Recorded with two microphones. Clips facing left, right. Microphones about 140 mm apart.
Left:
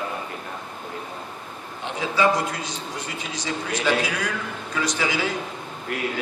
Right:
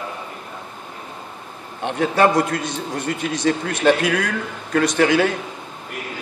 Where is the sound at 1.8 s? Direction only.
60° right (ahead or behind).